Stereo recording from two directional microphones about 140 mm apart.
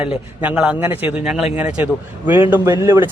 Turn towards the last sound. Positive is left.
turn(degrees=-15)  # may be behind; listen again after turning